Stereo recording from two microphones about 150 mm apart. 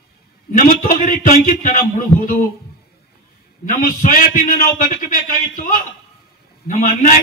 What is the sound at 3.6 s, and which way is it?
A man's voice, 60° left (ahead or behind).